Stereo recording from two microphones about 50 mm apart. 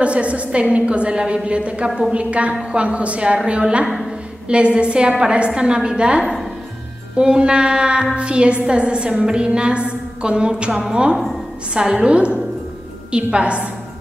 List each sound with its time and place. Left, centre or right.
0.0 s a woman's voice: right